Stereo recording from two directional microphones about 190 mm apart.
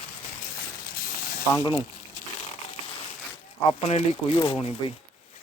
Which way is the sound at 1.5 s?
20° left (ahead or behind).